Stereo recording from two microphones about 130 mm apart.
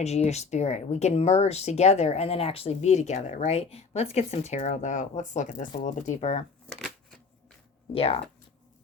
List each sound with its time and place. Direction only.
0.0 s speech: 55° left (ahead or behind)
6.7 s shuffling cards: 5° left (ahead or behind)
7.9 s speech: 50° left (ahead or behind)